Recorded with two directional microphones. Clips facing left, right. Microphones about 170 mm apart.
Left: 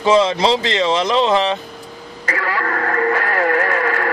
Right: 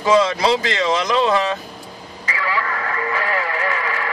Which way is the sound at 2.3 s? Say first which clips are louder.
Left 2 dB; 50° left (ahead or behind).